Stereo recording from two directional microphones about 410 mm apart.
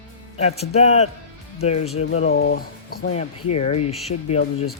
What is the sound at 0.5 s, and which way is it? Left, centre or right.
Speech, centre.